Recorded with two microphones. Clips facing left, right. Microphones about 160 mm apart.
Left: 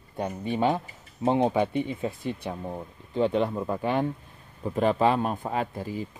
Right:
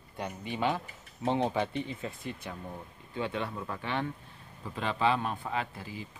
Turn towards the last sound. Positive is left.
turn(degrees=40)  # may be behind; listen again after turning